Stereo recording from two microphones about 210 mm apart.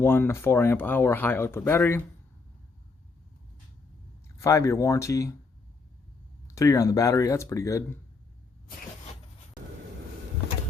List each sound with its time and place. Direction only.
0.0 s speech: 10° left (ahead or behind)
4.4 s speech: 15° left (ahead or behind)
6.5 s speech: 15° left (ahead or behind)